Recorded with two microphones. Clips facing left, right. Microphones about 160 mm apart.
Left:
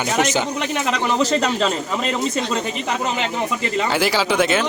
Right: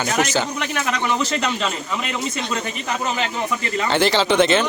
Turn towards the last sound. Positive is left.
turn(degrees=5)  # may be behind; listen again after turning